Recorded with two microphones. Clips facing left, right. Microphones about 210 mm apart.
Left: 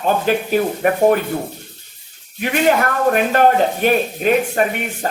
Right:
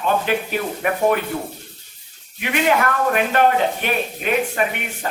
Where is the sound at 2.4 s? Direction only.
40° left (ahead or behind).